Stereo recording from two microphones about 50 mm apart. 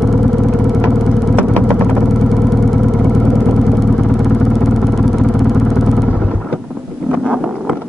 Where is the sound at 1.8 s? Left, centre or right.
Centre.